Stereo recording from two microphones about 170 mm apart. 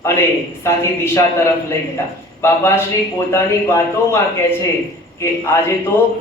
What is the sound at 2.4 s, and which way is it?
A man's voice, 15° left (ahead or behind).